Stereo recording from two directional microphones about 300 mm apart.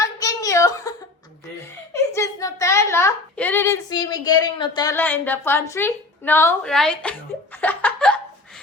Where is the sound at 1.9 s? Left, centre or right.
Centre.